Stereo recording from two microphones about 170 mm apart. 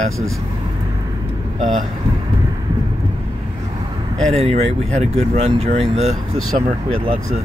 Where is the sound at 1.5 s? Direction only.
45° right (ahead or behind).